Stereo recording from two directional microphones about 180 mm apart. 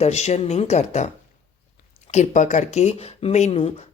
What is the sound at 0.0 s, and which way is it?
Speech, 40° left (ahead or behind).